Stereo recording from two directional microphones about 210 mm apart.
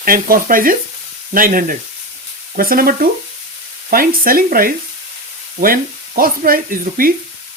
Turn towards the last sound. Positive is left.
turn(degrees=-45)  # may be behind; listen again after turning